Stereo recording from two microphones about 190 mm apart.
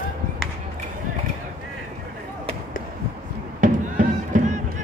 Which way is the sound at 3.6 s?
45° right (ahead or behind).